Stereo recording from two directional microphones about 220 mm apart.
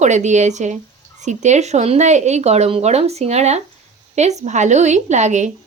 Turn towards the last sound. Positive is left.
turn(degrees=-35)  # may be behind; listen again after turning